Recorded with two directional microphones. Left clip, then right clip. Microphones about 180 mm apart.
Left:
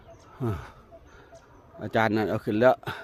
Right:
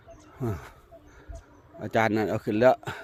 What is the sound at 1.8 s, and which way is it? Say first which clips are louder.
A man's voice: even; centre (ahead or behind).